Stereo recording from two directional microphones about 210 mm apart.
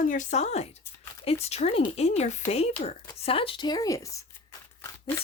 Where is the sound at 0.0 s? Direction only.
40° left (ahead or behind); by 4.3 s 15° left (ahead or behind).